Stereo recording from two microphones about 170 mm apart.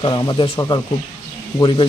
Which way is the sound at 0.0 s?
30° left (ahead or behind).